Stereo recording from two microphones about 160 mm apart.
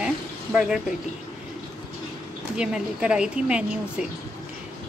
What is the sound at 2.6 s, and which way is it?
A woman's voice, 5° right (ahead or behind).